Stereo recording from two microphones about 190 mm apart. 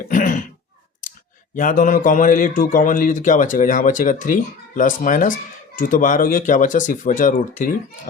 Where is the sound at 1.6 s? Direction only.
45° left (ahead or behind).